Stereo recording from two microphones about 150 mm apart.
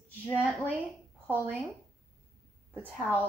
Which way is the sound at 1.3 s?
15° right (ahead or behind).